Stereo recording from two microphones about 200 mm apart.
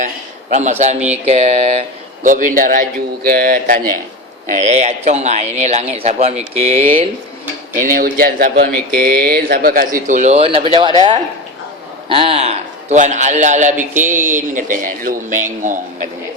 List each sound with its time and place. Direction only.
0.5 s speech: 35° right (ahead or behind)
0.9 s speech: 5° right (ahead or behind)
1.3 s speech: 30° right (ahead or behind)
7.8 s speech: 40° right (ahead or behind)
8.7 s mantra: 5° left (ahead or behind)
9.0 s speech: 50° right (ahead or behind)